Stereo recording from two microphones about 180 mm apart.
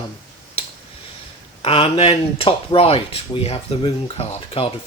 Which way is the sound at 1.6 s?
30° left (ahead or behind).